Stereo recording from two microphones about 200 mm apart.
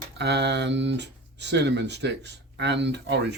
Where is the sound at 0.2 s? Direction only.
60° right (ahead or behind).